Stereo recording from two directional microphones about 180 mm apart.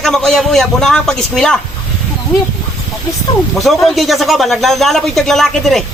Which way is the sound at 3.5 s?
Centre (ahead or behind).